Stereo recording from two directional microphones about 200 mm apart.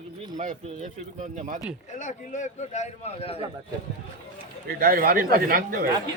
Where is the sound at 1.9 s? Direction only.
40° left (ahead or behind).